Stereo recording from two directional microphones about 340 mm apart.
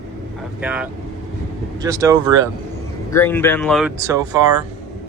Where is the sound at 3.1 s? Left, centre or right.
Centre.